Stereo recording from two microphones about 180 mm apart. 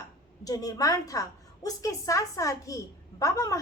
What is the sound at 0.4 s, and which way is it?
A woman's voice, 20° left (ahead or behind).